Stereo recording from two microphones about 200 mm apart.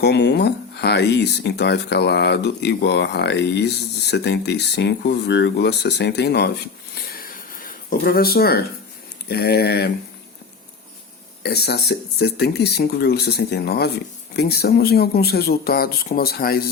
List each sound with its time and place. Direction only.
0.0 s speech: 55° left (ahead or behind)
6.9 s a sound: 45° left (ahead or behind)
9.3 s speech: 50° left (ahead or behind)
11.4 s speech: 55° left (ahead or behind)